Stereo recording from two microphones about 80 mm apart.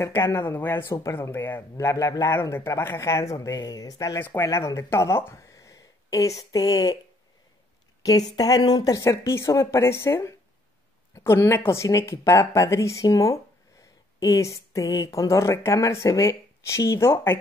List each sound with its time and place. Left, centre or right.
0.0 s speech: left
0.8 s speech: left
1.8 s speech: left
4.2 s speech: left
4.5 s speech: left
8.0 s speech: left